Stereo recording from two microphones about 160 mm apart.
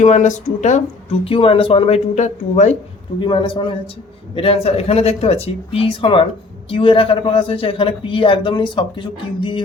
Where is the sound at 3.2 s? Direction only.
30° left (ahead or behind).